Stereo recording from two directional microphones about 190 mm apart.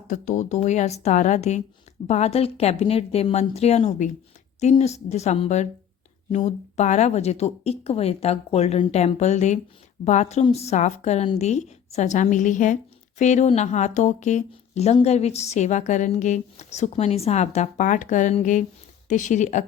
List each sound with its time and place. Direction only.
0.1 s a woman's voice: 40° left (ahead or behind)